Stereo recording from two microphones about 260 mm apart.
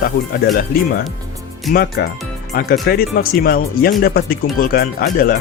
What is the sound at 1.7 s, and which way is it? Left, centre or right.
Speech, left.